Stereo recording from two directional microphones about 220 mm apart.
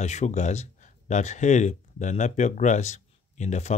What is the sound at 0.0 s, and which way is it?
Speech, 30° left (ahead or behind).